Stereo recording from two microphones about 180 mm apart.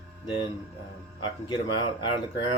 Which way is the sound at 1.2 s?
25° left (ahead or behind).